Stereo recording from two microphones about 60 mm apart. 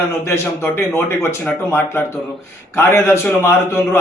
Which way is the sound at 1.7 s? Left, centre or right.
Left.